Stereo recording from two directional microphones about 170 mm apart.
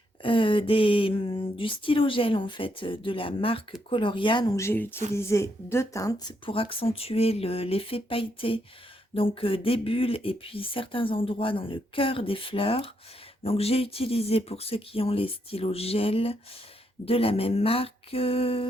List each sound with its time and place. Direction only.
0.2 s speech: 30° left (ahead or behind)
4.5 s a woman's voice: 15° left (ahead or behind)
6.4 s speech: 30° left (ahead or behind)